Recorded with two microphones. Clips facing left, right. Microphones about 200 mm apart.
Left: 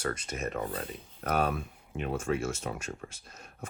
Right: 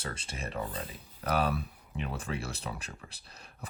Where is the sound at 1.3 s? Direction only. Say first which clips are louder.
Left 1 dB; 45° left (ahead or behind).